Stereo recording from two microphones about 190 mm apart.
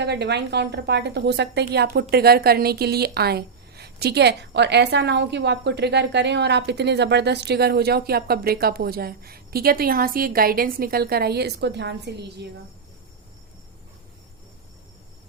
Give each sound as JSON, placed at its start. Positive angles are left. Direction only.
{"t": 0.0, "sound": "a woman's voice", "side_deg": -60}